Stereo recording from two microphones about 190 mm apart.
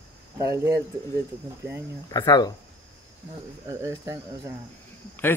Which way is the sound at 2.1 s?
20° left (ahead or behind).